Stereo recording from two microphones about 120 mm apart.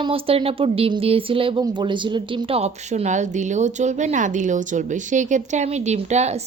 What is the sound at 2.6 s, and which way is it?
Speech, 75° right (ahead or behind).